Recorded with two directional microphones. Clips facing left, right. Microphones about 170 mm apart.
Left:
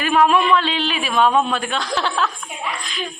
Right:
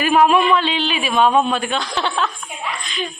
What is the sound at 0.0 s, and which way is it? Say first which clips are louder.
A man's voice: right 2 dB; 10° right (ahead or behind).